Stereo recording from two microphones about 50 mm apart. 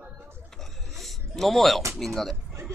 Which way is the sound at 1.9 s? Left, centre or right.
Centre.